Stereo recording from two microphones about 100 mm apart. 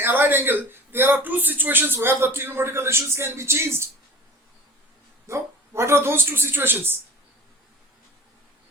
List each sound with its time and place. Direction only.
0.0 s a man's voice: 20° right (ahead or behind)
5.3 s a man's voice: 25° right (ahead or behind)